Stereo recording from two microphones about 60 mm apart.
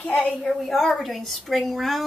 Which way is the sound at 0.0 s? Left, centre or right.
Centre.